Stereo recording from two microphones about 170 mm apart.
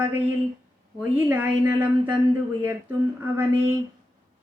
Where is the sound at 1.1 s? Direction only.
10° right (ahead or behind).